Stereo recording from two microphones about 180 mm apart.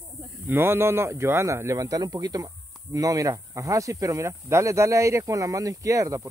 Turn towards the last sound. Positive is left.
turn(degrees=-20)  # may be behind; listen again after turning